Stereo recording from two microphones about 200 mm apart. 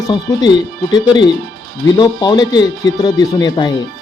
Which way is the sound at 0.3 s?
20° left (ahead or behind).